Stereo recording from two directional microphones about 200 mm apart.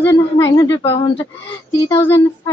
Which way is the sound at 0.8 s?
30° left (ahead or behind).